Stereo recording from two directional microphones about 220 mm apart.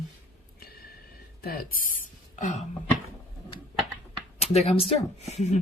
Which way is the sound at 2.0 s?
35° left (ahead or behind).